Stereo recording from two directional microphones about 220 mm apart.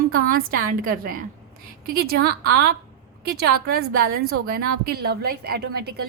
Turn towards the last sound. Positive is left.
turn(degrees=-45)  # may be behind; listen again after turning